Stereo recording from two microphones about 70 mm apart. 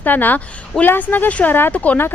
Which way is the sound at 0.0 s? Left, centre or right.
Left.